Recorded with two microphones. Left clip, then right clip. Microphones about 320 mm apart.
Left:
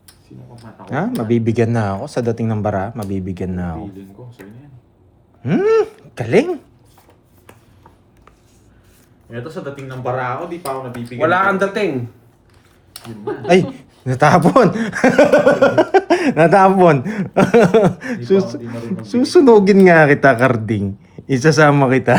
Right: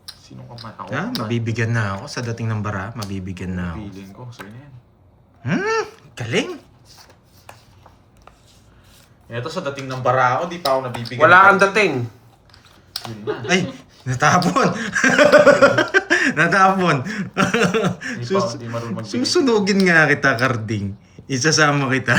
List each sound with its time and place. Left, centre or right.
0.9 s speech: centre
5.4 s speech: centre
11.2 s speech: right
13.5 s speech: centre